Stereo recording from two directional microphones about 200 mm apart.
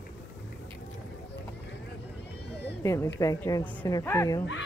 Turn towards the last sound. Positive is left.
turn(degrees=15)  # may be behind; listen again after turning